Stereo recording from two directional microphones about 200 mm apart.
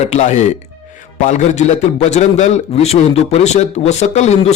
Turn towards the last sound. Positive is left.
turn(degrees=35)  # may be behind; listen again after turning